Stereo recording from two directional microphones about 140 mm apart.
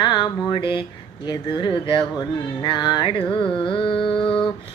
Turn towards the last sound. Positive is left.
turn(degrees=35)  # may be behind; listen again after turning